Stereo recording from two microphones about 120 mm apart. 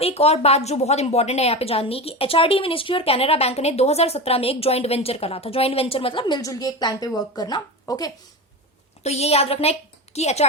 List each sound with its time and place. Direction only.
0.0 s a woman's voice: 60° left (ahead or behind); by 8.1 s 35° left (ahead or behind)
9.0 s a woman's voice: 60° left (ahead or behind)